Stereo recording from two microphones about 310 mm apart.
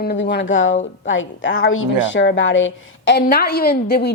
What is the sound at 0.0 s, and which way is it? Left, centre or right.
A woman's voice, left.